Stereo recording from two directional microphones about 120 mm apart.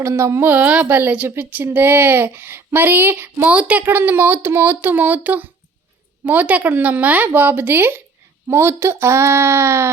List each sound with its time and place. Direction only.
0.0 s a woman's voice: 25° right (ahead or behind)